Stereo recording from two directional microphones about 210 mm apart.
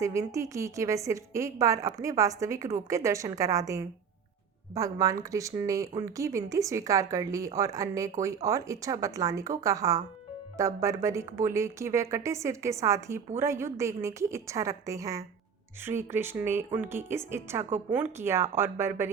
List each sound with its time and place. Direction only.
0.0 s a woman's voice: 15° right (ahead or behind)